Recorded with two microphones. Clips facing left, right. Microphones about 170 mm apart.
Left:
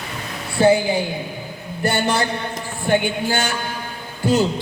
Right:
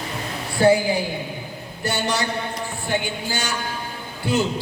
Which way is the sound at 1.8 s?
55° left (ahead or behind).